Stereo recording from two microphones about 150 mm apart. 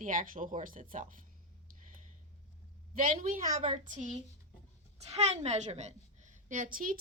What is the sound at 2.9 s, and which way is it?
Speech, 65° right (ahead or behind).